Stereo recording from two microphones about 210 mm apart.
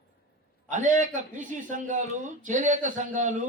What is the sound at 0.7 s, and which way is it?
A man's voice, 35° right (ahead or behind).